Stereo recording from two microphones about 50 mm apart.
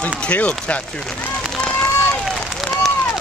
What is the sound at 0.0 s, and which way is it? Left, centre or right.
Speech, left.